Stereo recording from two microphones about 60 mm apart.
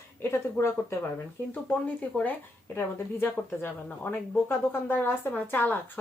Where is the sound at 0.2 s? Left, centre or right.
Left.